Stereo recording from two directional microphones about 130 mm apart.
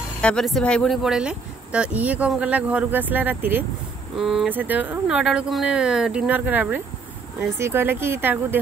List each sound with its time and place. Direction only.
0.2 s speech: 5° left (ahead or behind); by 3.6 s 15° right (ahead or behind)
4.2 s speech: centre (ahead or behind)
4.5 s speech: 15° right (ahead or behind)